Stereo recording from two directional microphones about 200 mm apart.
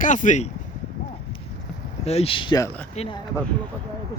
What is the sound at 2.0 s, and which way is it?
Speech, 30° left (ahead or behind).